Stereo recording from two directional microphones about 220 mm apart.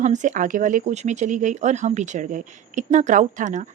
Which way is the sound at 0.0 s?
35° right (ahead or behind).